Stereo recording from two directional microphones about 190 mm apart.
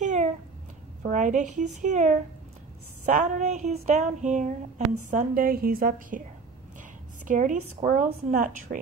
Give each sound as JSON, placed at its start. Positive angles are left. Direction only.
{"t": 0.0, "sound": "cat", "side_deg": -40}
{"t": 1.0, "sound": "a sound", "side_deg": -40}
{"t": 7.2, "sound": "speech", "side_deg": -45}